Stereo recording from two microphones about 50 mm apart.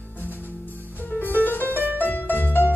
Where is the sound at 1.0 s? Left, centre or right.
Left.